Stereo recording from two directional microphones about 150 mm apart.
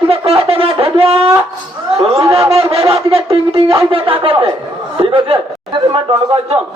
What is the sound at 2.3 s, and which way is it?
Wind instrument, 40° right (ahead or behind).